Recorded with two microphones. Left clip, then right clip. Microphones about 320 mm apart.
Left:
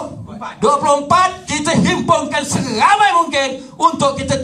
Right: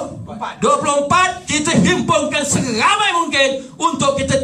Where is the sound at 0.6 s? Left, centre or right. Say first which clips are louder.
Left 2 dB; centre.